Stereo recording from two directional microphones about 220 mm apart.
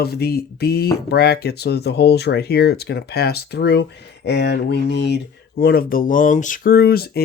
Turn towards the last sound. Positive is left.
turn(degrees=45)  # may be behind; listen again after turning